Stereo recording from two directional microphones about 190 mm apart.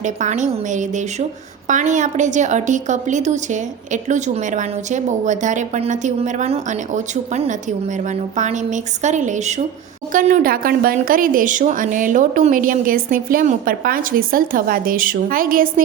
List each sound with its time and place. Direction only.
0.0 s a woman's voice: 40° right (ahead or behind)